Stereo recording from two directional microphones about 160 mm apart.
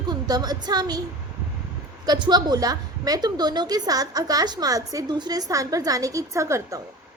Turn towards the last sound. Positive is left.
turn(degrees=-20)  # may be behind; listen again after turning